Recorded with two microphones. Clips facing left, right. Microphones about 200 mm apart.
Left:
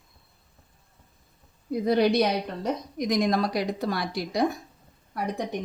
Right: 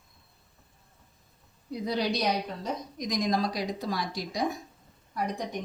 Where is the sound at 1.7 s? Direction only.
55° left (ahead or behind).